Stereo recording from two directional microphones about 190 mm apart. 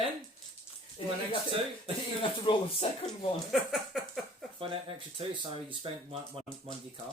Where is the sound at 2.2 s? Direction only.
30° left (ahead or behind).